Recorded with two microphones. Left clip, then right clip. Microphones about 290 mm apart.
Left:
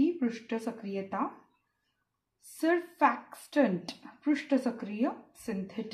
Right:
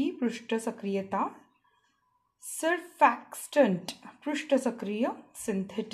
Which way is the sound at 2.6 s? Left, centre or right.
Right.